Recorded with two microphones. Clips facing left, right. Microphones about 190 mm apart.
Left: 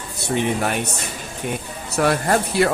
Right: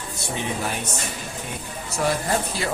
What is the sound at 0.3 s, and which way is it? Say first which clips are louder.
Speech: left 7 dB; 60° left (ahead or behind).